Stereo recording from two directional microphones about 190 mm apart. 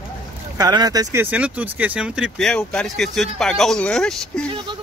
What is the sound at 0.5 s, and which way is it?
Speech, 20° right (ahead or behind).